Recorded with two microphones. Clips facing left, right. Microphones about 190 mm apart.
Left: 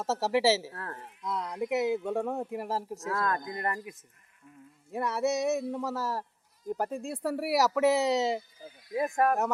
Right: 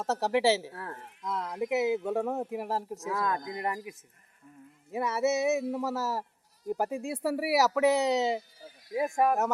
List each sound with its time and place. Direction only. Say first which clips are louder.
0.0 s speech: even; centre (ahead or behind)
4.9 s speech: right 1 dB; centre (ahead or behind)